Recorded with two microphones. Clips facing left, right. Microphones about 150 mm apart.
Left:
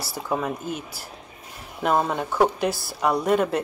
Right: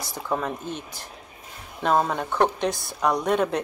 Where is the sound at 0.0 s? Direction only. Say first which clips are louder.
Left 1 dB; 10° left (ahead or behind).